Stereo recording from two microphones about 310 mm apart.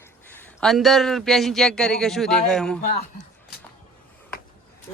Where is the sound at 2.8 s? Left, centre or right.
Left.